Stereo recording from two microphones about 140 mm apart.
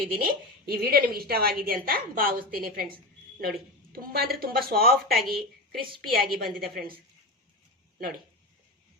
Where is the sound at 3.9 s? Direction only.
90° right.